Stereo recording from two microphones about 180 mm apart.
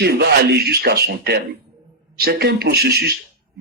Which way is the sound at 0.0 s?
65° right (ahead or behind).